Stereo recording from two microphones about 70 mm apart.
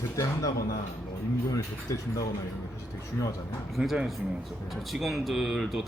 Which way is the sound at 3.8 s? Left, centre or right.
Centre.